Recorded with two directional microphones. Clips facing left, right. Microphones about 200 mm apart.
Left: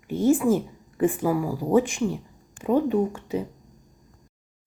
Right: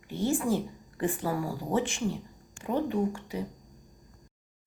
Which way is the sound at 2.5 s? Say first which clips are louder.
Left 7 dB; 20° left (ahead or behind).